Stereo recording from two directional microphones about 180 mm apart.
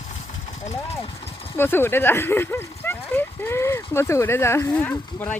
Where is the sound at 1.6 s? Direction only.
10° left (ahead or behind).